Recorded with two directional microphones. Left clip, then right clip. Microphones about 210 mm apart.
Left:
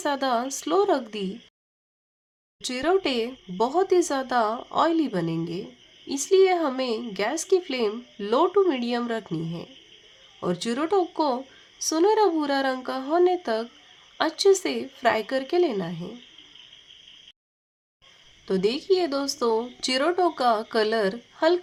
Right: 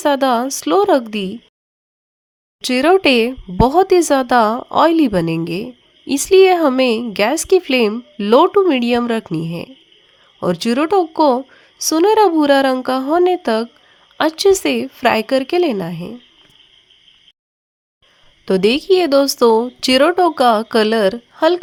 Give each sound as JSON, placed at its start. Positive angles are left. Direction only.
{"t": 0.0, "sound": "speech", "side_deg": -35}
{"t": 2.6, "sound": "speech", "side_deg": -35}
{"t": 18.4, "sound": "speech", "side_deg": -35}